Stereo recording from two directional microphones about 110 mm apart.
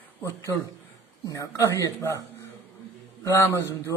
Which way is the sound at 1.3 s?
30° left (ahead or behind).